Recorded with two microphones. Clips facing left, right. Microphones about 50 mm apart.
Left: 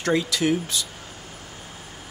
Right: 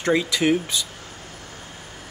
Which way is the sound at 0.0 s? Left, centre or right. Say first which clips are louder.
Right 2 dB; right.